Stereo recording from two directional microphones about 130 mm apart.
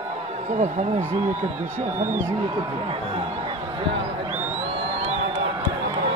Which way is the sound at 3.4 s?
40° right (ahead or behind).